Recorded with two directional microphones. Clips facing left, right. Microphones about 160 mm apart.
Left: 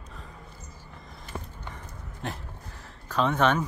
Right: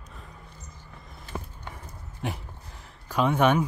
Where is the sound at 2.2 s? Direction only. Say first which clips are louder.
Right 2 dB; 15° right (ahead or behind).